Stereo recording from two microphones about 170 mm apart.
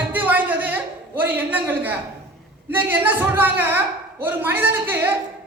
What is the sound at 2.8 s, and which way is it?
A woman's voice, 10° right (ahead or behind).